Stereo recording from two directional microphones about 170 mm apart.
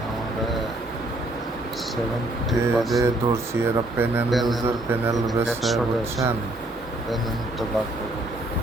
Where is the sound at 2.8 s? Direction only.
Centre (ahead or behind).